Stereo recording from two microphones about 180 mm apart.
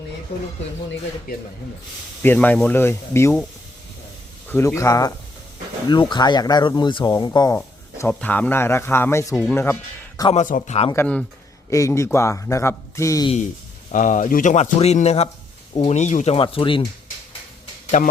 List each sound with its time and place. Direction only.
2.2 s a man's voice: 10° left (ahead or behind)
4.4 s a man's voice: 15° left (ahead or behind)
10.3 s speech: 45° left (ahead or behind)
10.9 s a man's voice: 5° left (ahead or behind)
13.9 s speech: 45° left (ahead or behind); by 16.8 s 30° left (ahead or behind)
18.0 s speech: 45° left (ahead or behind)